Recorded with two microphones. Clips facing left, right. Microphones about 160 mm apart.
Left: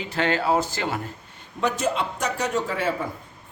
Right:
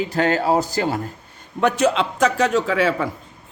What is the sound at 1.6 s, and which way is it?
A man's voice, 70° right (ahead or behind).